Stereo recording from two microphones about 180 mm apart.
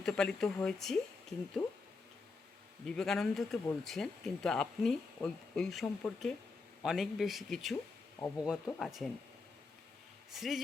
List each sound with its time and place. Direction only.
0.0 s speech: 5° left (ahead or behind)
2.8 s speech: 5° left (ahead or behind)
10.3 s speech: centre (ahead or behind)